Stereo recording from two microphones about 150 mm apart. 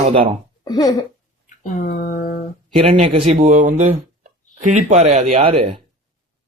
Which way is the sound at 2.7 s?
40° right (ahead or behind).